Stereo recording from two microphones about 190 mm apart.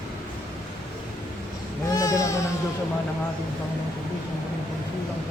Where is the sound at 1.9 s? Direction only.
15° left (ahead or behind).